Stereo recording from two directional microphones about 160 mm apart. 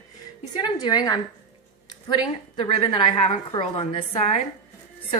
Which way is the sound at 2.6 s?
40° left (ahead or behind).